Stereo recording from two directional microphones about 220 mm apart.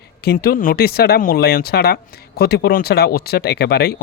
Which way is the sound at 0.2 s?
45° left (ahead or behind).